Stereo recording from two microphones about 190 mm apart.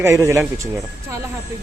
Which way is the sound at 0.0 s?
15° right (ahead or behind).